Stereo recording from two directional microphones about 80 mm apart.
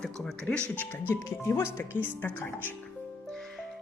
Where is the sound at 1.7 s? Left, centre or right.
Left.